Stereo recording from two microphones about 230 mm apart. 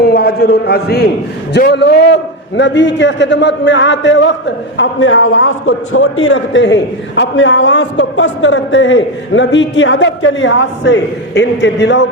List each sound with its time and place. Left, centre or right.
0.0 s a man's voice: left